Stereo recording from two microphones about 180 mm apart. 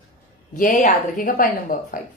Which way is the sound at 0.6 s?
50° left (ahead or behind).